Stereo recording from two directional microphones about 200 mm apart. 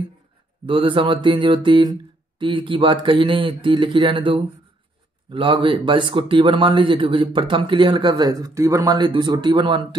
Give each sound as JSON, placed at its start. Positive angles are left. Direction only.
{"t": 0.7, "sound": "speech", "side_deg": -25}